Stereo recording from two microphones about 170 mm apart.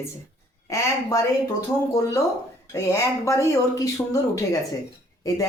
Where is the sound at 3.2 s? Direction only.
20° left (ahead or behind).